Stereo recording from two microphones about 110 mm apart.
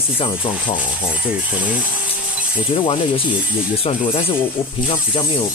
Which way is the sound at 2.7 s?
50° left (ahead or behind).